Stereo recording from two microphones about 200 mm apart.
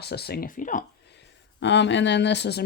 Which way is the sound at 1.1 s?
60° left (ahead or behind).